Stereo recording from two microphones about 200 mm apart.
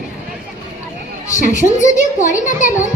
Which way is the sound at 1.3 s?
40° left (ahead or behind).